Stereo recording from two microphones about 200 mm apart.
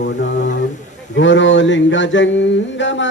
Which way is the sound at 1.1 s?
65° left (ahead or behind).